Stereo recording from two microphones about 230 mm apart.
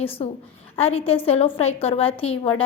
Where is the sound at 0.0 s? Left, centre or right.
Left.